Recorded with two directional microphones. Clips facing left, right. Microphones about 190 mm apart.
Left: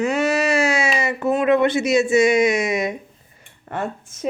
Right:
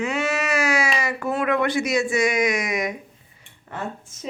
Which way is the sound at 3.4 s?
50° left (ahead or behind).